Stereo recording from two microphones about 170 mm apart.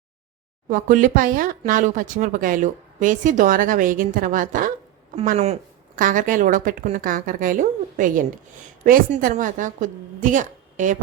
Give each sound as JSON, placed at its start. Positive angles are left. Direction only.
{"t": 0.7, "sound": "speech", "side_deg": -50}